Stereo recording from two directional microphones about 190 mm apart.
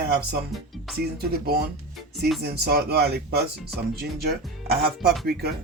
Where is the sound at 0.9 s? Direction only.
55° right (ahead or behind).